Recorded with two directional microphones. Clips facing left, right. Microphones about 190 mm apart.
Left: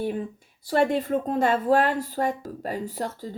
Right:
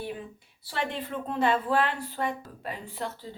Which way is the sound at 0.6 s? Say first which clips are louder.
Left 10 dB; 45° left (ahead or behind).